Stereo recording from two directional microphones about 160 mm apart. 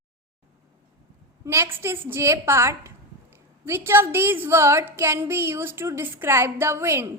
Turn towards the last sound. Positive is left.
turn(degrees=-15)  # may be behind; listen again after turning